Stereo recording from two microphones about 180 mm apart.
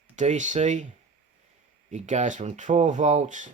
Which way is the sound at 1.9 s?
40° right (ahead or behind).